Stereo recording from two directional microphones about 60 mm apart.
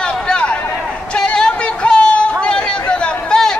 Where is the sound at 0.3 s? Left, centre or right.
Centre.